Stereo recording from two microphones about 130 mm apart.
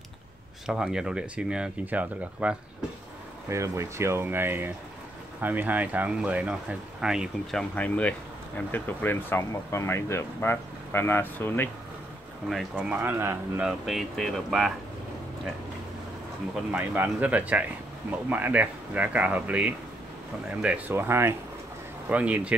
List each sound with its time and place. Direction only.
0.7 s speech: 5° right (ahead or behind)
3.4 s speech: 20° right (ahead or behind); by 7.6 s 5° right (ahead or behind)
7.7 s speech: 10° left (ahead or behind)
12.4 s speech: 5° right (ahead or behind)
16.7 s speech: 15° right (ahead or behind)